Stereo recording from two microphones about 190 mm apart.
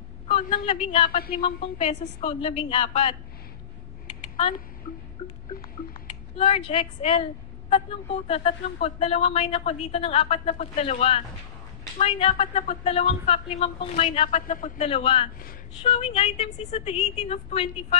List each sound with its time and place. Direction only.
0.3 s a woman's voice: 30° left (ahead or behind)
5.2 s speech: 35° left (ahead or behind)
5.6 s a sound: 30° left (ahead or behind)
7.7 s speech: 30° left (ahead or behind)